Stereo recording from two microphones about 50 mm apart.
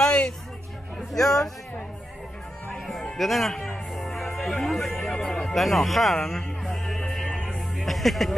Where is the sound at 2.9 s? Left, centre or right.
Centre.